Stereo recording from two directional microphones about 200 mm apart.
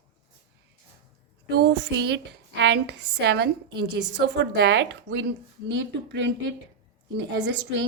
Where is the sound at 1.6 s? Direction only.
60° right (ahead or behind).